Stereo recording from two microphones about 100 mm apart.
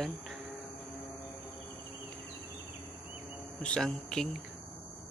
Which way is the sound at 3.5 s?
5° left (ahead or behind).